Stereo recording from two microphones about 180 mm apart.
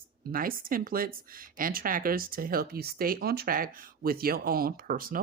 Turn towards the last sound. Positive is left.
turn(degrees=-50)  # may be behind; listen again after turning